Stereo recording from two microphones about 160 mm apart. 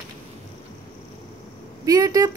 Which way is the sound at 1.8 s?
20° right (ahead or behind).